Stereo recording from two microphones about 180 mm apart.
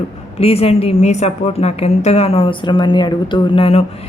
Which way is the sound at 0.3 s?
35° left (ahead or behind).